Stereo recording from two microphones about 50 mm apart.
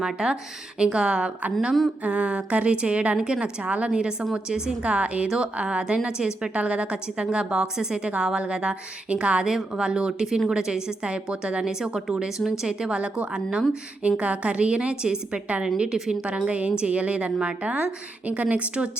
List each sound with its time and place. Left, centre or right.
0.0 s a woman's voice: centre
4.8 s a woman's voice: right